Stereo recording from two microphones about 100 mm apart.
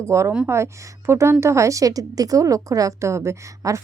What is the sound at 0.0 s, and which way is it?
A woman's voice, 30° right (ahead or behind).